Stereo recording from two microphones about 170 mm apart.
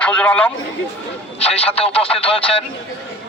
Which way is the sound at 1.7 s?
35° left (ahead or behind).